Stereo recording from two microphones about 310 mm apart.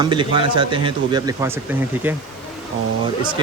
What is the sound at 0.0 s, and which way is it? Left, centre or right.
Speech, centre.